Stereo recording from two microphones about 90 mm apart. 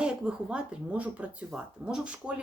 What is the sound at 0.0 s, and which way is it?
Speech, 10° right (ahead or behind).